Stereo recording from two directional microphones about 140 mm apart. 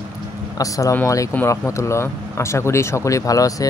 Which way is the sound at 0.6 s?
25° left (ahead or behind).